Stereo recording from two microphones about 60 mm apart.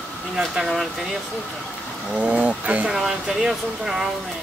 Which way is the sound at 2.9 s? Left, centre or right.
Centre.